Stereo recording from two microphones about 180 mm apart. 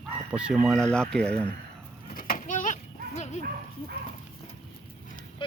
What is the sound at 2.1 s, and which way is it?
Goat, 55° left (ahead or behind).